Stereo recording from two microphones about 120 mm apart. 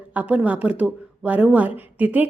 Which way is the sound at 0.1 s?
10° right (ahead or behind).